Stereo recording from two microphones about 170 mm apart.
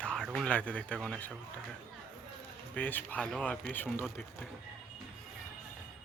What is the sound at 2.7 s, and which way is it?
Speech, 10° left (ahead or behind).